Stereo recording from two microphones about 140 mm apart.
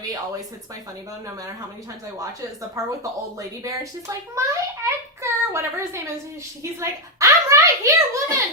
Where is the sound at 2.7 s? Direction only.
25° right (ahead or behind).